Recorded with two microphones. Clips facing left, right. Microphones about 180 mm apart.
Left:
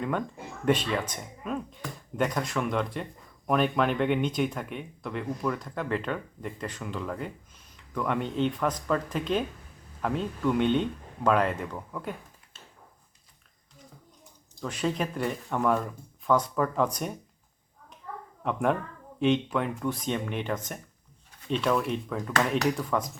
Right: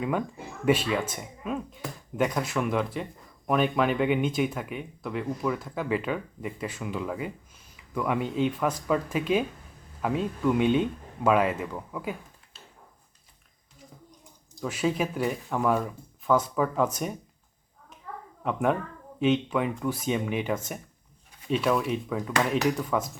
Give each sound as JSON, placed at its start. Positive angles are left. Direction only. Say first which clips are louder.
{"t": 0.0, "sound": "speech", "louder": "right 2 dB", "side_deg": -5}
{"t": 14.6, "sound": "speech", "louder": "right 2 dB", "side_deg": -5}
{"t": 18.4, "sound": "speech", "louder": "right 1 dB", "side_deg": 0}